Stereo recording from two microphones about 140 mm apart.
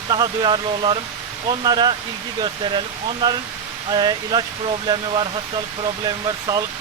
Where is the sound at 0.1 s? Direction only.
35° right (ahead or behind).